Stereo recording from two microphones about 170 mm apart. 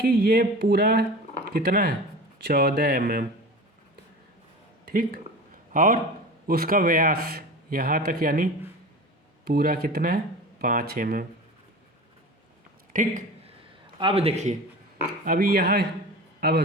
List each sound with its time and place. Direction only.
0.0 s a man's voice: 65° right (ahead or behind)
4.9 s a man's voice: 60° right (ahead or behind)
12.9 s a man's voice: 50° right (ahead or behind)
14.0 s a man's voice: 35° right (ahead or behind)
15.2 s a man's voice: 60° right (ahead or behind)